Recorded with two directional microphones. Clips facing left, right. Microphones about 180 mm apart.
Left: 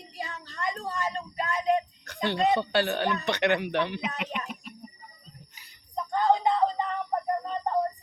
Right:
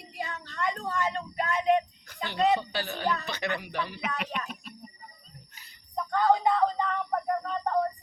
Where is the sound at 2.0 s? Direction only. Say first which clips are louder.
Left 8 dB; 75° left (ahead or behind).